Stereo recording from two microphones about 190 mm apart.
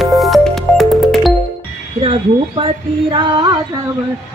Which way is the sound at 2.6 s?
25° right (ahead or behind).